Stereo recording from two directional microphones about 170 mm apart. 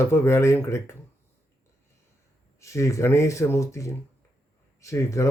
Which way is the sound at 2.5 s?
15° left (ahead or behind).